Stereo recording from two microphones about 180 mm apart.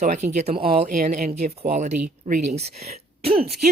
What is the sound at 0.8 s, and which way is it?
Speech, 45° right (ahead or behind).